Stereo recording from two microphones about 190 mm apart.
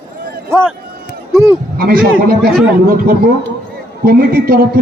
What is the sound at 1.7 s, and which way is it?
A man's voice, 50° right (ahead or behind).